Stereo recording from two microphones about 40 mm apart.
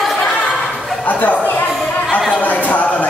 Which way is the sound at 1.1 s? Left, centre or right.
Left.